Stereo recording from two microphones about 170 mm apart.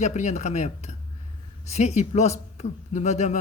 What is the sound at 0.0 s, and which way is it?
A man's voice, 40° left (ahead or behind).